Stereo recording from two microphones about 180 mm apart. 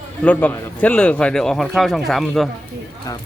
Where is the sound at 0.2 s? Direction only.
10° left (ahead or behind).